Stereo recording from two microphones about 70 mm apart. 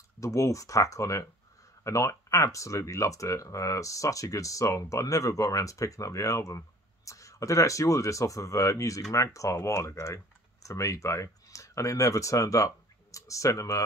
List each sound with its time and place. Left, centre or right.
0.2 s speech: left